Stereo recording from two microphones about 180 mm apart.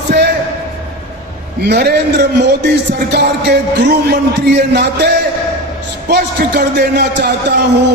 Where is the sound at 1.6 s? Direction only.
65° right (ahead or behind).